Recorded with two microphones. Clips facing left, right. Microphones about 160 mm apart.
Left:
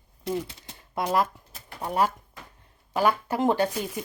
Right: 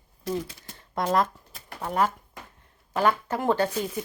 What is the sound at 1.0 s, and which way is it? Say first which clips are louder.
Shuffling cards: right 1 dB; 5° left (ahead or behind).